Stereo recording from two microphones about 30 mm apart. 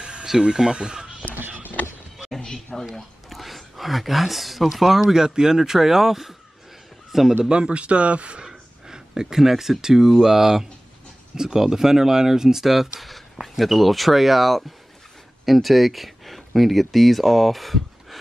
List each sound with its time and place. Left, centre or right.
0.0 s a sound: right
0.4 s speech: right
1.3 s a sound: right
2.3 s a sound: centre
3.3 s speech: centre; by 5.6 s right
5.6 s a man's voice: centre
7.4 s speech: right
8.5 s speech: right
13.0 s speech: centre